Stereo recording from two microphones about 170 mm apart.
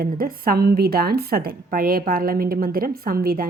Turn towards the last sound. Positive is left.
turn(degrees=-60)  # may be behind; listen again after turning